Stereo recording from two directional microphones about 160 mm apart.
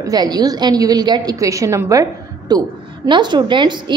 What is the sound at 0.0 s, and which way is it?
A woman's voice, 25° right (ahead or behind).